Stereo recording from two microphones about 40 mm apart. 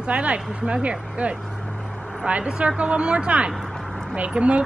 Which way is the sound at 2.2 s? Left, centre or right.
Right.